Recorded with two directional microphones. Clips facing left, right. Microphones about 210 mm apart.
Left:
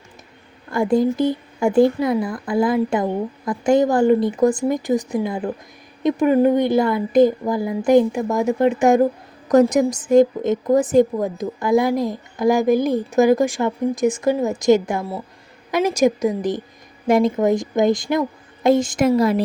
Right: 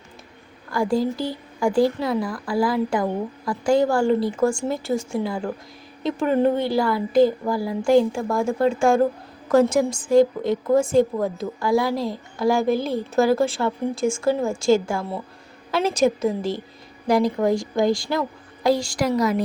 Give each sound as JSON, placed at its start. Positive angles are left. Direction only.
{"t": 0.7, "sound": "a woman's voice", "side_deg": 20}